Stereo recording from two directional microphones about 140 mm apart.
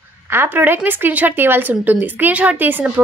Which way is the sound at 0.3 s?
15° right (ahead or behind).